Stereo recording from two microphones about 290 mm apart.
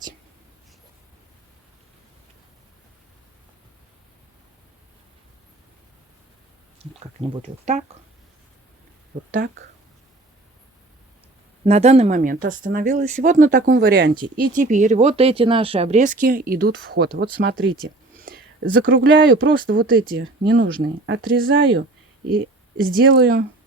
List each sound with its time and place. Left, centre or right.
7.3 s speech: right
11.6 s speech: right